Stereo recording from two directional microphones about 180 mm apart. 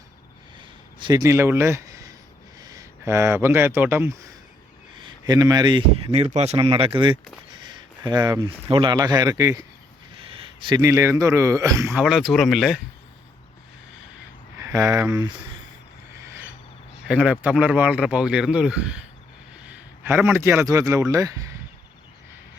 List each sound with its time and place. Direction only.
0.9 s a man's voice: 25° right (ahead or behind)
4.9 s speech: 25° right (ahead or behind)
10.2 s a man's voice: 30° right (ahead or behind)
12.0 s speech: centre (ahead or behind)
14.6 s speech: 15° right (ahead or behind)
17.1 s a man's voice: 5° right (ahead or behind)